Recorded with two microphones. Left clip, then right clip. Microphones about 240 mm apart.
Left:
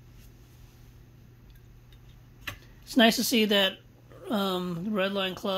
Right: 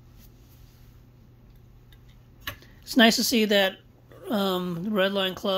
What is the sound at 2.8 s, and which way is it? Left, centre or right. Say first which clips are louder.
Speech: right 3 dB; centre.